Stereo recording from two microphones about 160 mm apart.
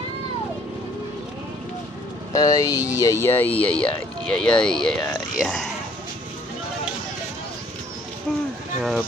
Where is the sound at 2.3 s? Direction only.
20° left (ahead or behind); by 5.6 s centre (ahead or behind).